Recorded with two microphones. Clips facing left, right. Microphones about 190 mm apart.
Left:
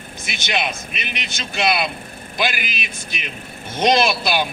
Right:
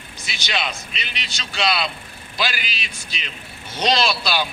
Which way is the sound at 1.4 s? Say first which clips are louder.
Left 2 dB; 20° left (ahead or behind).